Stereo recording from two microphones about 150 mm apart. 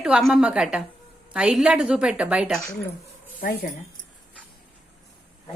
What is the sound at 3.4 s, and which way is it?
Speech, 90° left.